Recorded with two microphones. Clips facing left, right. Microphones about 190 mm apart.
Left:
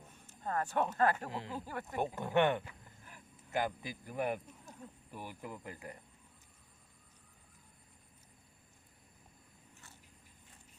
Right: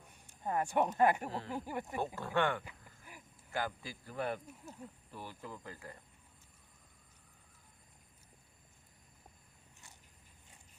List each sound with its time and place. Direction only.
0.1 s speech: 15° right (ahead or behind)
2.0 s speech: 20° left (ahead or behind)
2.6 s cricket: 10° right (ahead or behind)
3.5 s a man's voice: 20° left (ahead or behind)
4.8 s speech: 10° right (ahead or behind)
5.1 s a man's voice: 15° left (ahead or behind)